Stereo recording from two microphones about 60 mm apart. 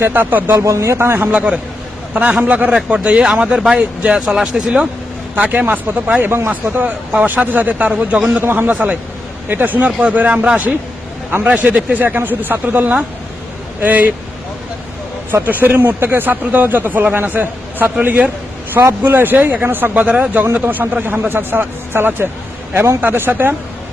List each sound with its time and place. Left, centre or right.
0.1 s a man's voice: right
0.6 s a man's voice: right
1.3 s speech: centre
5.4 s speech: right
8.4 s a man's voice: right
11.9 s a man's voice: right
15.3 s a man's voice: right
20.1 s speech: centre
20.4 s a man's voice: right